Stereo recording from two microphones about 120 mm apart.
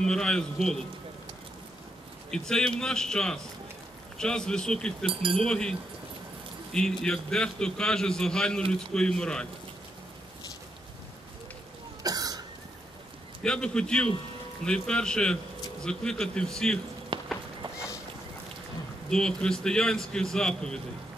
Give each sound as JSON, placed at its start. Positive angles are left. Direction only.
{"t": 0.0, "sound": "a man's voice", "side_deg": 5}
{"t": 2.3, "sound": "a man's voice", "side_deg": 5}
{"t": 5.0, "sound": "speech", "side_deg": -50}
{"t": 5.4, "sound": "a man's voice", "side_deg": 5}
{"t": 12.0, "sound": "cough", "side_deg": -30}
{"t": 13.4, "sound": "a man's voice", "side_deg": 5}
{"t": 17.1, "sound": "music", "side_deg": -45}
{"t": 19.0, "sound": "a man's voice", "side_deg": 5}